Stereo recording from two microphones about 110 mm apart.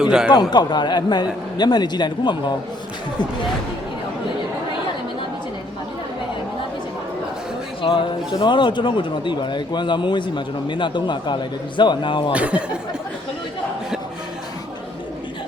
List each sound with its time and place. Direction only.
0.0 s a man's voice: 5° right (ahead or behind)
0.5 s a man's voice: 40° left (ahead or behind)
7.8 s a man's voice: 50° left (ahead or behind)
12.3 s speech: 10° right (ahead or behind)